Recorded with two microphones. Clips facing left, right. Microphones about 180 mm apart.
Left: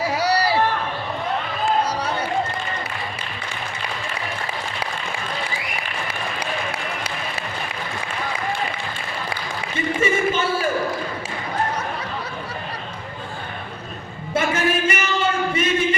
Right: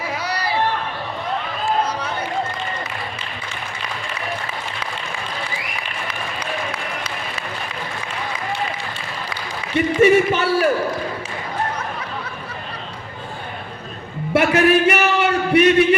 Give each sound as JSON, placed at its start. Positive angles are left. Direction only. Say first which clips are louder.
{"t": 0.1, "sound": "a sound", "louder": "left 5 dB", "side_deg": 35}
{"t": 9.7, "sound": "music", "louder": "right 8 dB", "side_deg": -70}
{"t": 14.3, "sound": "music", "louder": "right 6 dB", "side_deg": -70}